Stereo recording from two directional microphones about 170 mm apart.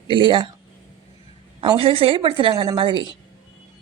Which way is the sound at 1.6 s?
30° right (ahead or behind).